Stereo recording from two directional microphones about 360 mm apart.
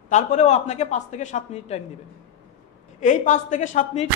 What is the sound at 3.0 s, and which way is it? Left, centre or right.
A man's voice, left.